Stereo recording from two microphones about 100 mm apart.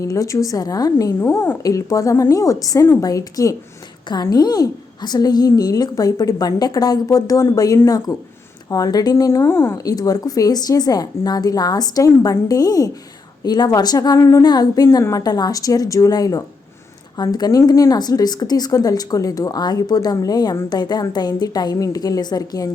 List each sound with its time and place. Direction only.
0.0 s a woman's voice: 35° left (ahead or behind)
9.7 s a woman's voice: 40° left (ahead or behind)